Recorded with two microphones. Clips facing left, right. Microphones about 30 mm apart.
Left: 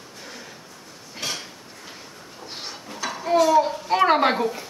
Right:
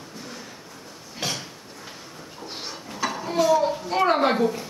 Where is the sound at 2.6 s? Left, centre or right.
Centre.